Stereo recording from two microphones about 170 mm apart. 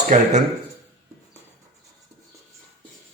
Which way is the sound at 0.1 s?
45° right (ahead or behind).